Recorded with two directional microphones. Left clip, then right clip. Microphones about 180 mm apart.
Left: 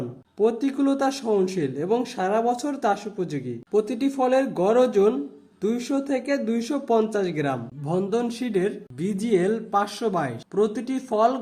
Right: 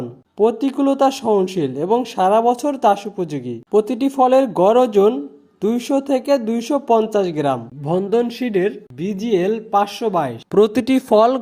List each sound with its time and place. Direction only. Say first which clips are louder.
0.3 s speech: right 6 dB; 30° right (ahead or behind)
10.5 s speech: right 10 dB; 50° right (ahead or behind)